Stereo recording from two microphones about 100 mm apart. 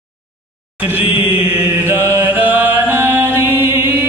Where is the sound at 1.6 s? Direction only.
25° right (ahead or behind).